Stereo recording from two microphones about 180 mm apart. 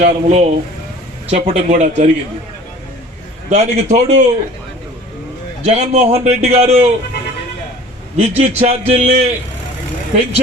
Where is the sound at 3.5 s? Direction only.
40° right (ahead or behind).